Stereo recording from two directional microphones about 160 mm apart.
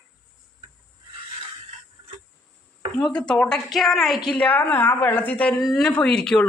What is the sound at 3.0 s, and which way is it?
A woman's voice, 5° left (ahead or behind).